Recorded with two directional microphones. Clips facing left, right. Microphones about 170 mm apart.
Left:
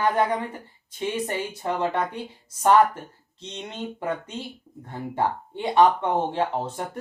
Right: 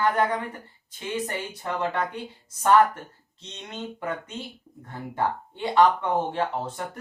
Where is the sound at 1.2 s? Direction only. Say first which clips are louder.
Left 4 dB; 20° left (ahead or behind).